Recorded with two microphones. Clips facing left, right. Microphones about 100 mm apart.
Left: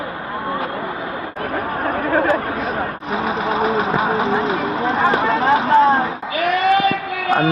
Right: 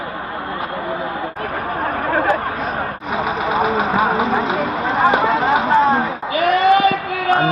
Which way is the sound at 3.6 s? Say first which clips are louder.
Right 2 dB; 10° right (ahead or behind).